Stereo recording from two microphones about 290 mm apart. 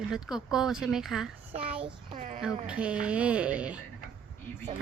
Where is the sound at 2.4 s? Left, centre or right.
Centre.